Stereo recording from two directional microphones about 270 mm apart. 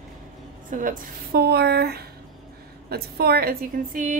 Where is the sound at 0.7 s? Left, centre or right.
Right.